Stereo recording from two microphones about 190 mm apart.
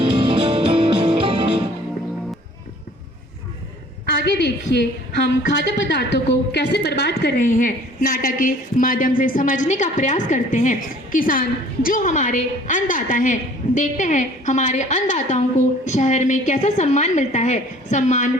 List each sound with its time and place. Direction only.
0.0 s music: 30° right (ahead or behind)
4.3 s a woman's voice: 60° left (ahead or behind)
7.3 s a woman's voice: 45° left (ahead or behind)